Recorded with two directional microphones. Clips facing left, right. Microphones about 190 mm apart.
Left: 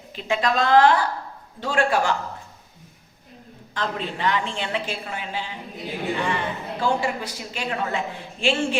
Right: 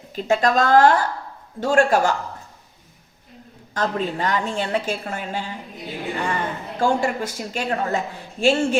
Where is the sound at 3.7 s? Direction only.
45° right (ahead or behind).